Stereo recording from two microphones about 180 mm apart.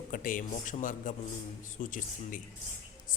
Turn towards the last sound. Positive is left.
turn(degrees=50)  # may be behind; listen again after turning